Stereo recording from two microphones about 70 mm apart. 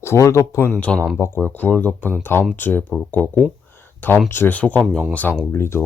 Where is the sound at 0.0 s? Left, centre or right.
Left.